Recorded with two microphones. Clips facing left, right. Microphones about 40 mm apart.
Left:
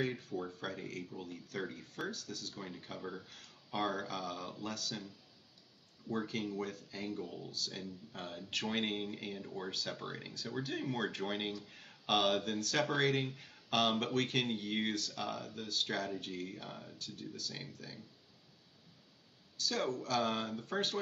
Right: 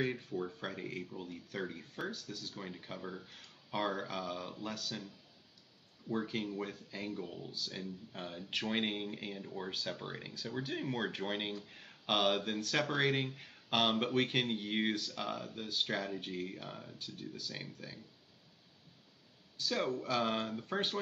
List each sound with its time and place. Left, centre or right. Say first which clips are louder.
0.0 s speech: right 1 dB; centre
19.5 s speech: right 1 dB; centre